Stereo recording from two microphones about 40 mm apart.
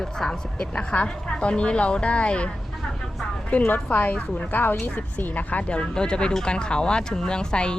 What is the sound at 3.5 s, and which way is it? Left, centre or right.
A woman's voice, left.